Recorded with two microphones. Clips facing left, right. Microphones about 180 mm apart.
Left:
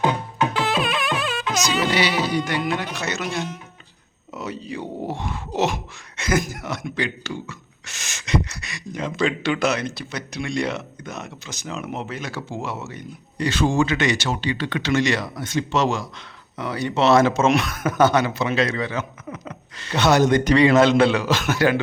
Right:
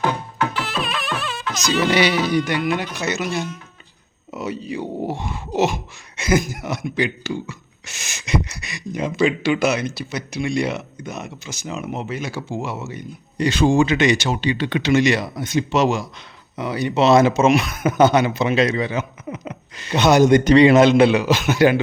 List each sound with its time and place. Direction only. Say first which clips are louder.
0.0 s music: left 1 dB; 20° left (ahead or behind)
1.9 s music: right 4 dB; 20° right (ahead or behind)
2.9 s speech: right 3 dB; 5° right (ahead or behind)
13.3 s speech: right 4 dB; 15° right (ahead or behind)